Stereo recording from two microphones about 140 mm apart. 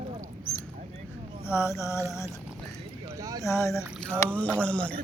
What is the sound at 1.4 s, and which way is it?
Mantra, 20° left (ahead or behind).